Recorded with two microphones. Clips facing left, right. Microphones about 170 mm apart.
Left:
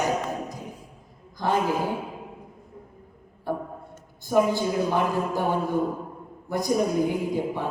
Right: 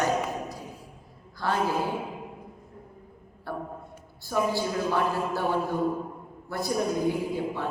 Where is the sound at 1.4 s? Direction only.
20° left (ahead or behind).